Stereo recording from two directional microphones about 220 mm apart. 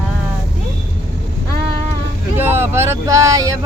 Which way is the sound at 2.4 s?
10° right (ahead or behind).